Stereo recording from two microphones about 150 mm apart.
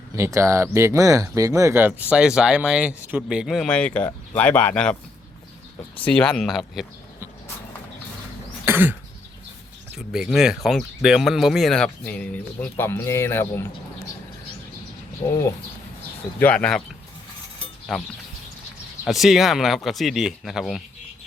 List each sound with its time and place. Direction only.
0.2 s speech: 20° right (ahead or behind); by 4.9 s 5° left (ahead or behind)
6.0 s speech: 5° left (ahead or behind)
8.6 s cough: 15° right (ahead or behind)
10.1 s speech: 5° right (ahead or behind); by 13.7 s 15° left (ahead or behind)
16.4 s speech: 10° left (ahead or behind)
17.9 s speech: centre (ahead or behind)